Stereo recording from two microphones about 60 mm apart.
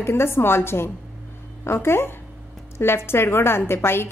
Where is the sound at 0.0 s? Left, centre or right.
Left.